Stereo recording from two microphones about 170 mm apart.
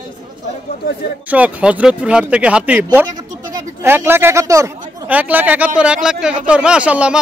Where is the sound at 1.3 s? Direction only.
10° right (ahead or behind).